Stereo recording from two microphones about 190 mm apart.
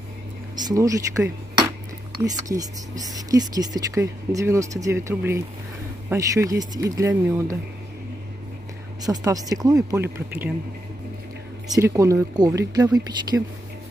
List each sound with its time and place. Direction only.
0.6 s speech: 20° right (ahead or behind)
2.4 s speech: 20° right (ahead or behind)
9.0 s speech: 20° right (ahead or behind)
11.7 s speech: 15° right (ahead or behind)